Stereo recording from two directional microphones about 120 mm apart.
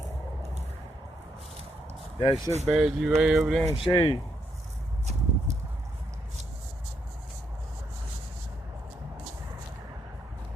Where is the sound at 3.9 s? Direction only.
45° left (ahead or behind).